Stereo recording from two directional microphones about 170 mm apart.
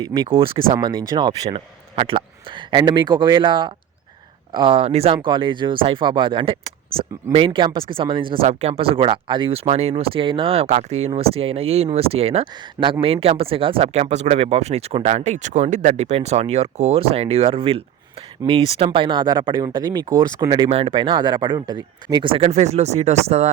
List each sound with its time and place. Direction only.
0.0 s speech: 30° right (ahead or behind)
20.7 s speech: 35° right (ahead or behind)